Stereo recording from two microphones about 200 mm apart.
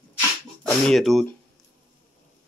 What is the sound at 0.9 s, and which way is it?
Speech, centre (ahead or behind).